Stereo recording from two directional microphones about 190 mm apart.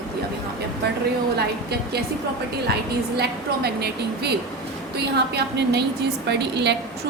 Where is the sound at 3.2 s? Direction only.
60° right (ahead or behind).